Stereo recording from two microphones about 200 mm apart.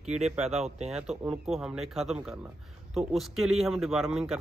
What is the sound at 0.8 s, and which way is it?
A man's voice, centre (ahead or behind).